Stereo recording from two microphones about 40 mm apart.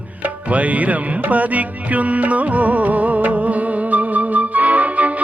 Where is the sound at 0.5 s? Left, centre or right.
Right.